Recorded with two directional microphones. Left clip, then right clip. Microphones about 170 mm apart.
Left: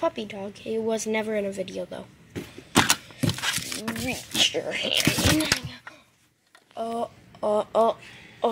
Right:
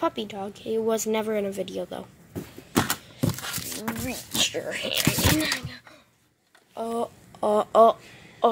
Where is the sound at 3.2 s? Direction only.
20° right (ahead or behind).